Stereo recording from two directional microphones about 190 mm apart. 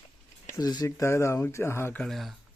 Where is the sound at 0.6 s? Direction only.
20° left (ahead or behind); by 2.3 s centre (ahead or behind).